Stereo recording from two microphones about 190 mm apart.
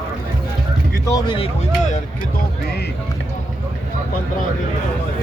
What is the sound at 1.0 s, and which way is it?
Speech, 20° left (ahead or behind).